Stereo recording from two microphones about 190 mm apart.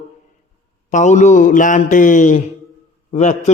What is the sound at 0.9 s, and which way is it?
A man's voice, 40° left (ahead or behind).